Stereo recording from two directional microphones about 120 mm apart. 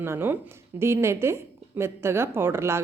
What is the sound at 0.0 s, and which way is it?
Speech, 20° right (ahead or behind).